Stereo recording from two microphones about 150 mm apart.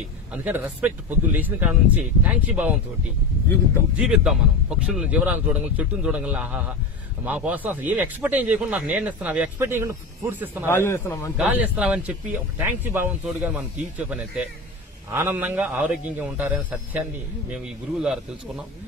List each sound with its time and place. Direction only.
0.3 s speech: 10° right (ahead or behind)
4.0 s speech: 5° right (ahead or behind)
10.7 s a man's voice: 15° left (ahead or behind)
11.3 s speech: 10° right (ahead or behind)